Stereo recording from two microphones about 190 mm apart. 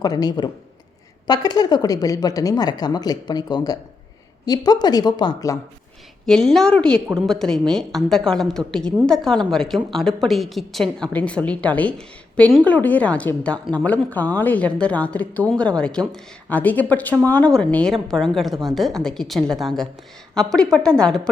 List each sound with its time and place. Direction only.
0.0 s a woman's voice: 20° left (ahead or behind)
6.2 s speech: centre (ahead or behind)